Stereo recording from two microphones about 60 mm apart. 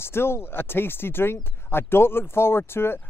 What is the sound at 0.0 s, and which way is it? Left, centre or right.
Speech, left.